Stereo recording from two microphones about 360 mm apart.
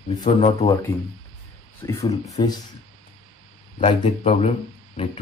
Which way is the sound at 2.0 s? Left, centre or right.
Centre.